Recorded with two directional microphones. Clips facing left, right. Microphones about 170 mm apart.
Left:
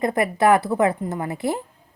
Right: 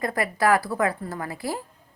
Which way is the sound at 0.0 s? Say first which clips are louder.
Left 5 dB; 20° left (ahead or behind).